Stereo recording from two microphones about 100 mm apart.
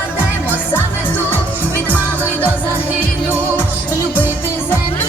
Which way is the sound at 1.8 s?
15° left (ahead or behind).